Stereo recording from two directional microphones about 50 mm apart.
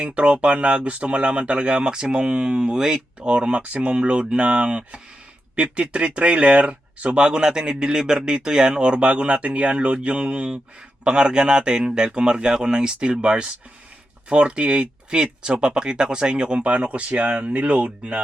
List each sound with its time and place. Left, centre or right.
0.0 s speech: right